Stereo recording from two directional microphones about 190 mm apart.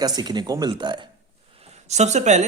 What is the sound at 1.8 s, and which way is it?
Speech, 35° right (ahead or behind).